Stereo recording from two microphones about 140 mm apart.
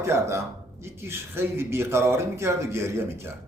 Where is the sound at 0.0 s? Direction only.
20° right (ahead or behind).